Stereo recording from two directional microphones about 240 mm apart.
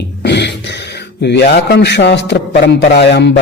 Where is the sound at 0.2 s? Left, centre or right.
Left.